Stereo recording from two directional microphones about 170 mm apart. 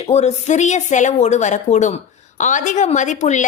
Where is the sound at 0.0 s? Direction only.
40° left (ahead or behind).